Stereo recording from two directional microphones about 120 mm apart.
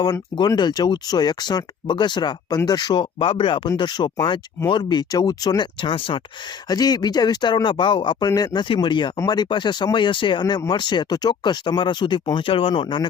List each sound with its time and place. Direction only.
0.0 s speech: 35° left (ahead or behind)
6.7 s speech: 35° left (ahead or behind)